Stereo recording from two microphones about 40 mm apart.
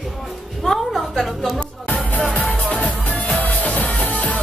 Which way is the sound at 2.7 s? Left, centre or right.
Left.